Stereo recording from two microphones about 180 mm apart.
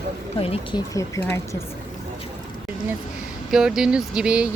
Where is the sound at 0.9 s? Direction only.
15° left (ahead or behind).